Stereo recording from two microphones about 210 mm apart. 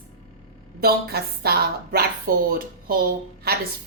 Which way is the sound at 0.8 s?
45° right (ahead or behind).